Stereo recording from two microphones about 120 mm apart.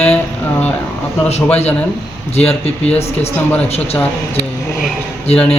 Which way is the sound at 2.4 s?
60° left (ahead or behind).